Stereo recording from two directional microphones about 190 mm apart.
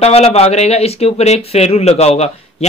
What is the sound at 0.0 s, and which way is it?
Speech, 35° left (ahead or behind).